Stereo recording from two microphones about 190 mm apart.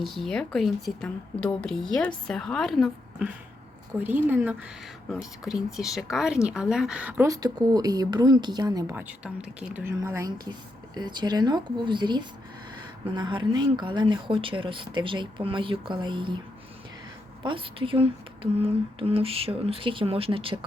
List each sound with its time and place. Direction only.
0.0 s a woman's voice: centre (ahead or behind); by 16.4 s 25° right (ahead or behind)
17.4 s speech: 25° right (ahead or behind)